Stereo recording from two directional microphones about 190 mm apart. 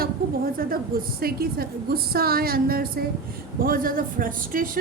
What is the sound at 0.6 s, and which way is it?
A woman's voice, 50° right (ahead or behind).